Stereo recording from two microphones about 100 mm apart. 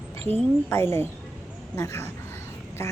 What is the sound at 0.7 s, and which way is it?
Speech, 25° left (ahead or behind).